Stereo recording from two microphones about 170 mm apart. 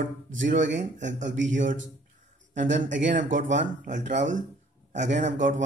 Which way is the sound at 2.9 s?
90° right.